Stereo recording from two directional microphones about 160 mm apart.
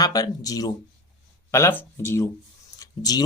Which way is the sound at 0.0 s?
25° left (ahead or behind).